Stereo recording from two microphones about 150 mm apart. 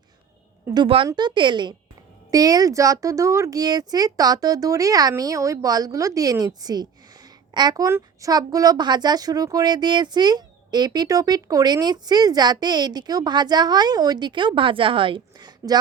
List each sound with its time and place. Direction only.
0.7 s a woman's voice: 35° right (ahead or behind)